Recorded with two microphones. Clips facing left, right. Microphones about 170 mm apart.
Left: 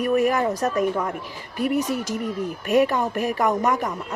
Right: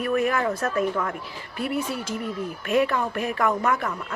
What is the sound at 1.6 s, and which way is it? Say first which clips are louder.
Speech: left 5 dB; 40° left (ahead or behind).